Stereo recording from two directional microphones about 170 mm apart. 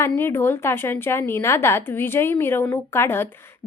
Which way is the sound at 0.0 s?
15° left (ahead or behind).